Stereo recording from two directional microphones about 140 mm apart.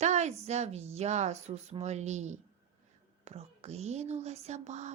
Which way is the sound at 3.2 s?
50° right (ahead or behind).